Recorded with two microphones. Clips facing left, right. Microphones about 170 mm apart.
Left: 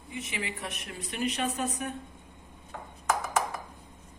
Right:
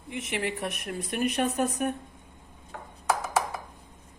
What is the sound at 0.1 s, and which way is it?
A woman's voice, 70° right (ahead or behind).